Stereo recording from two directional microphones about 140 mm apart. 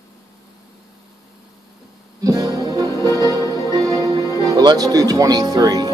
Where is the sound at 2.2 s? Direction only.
25° right (ahead or behind).